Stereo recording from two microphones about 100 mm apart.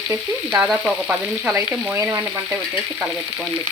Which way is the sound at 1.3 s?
15° right (ahead or behind).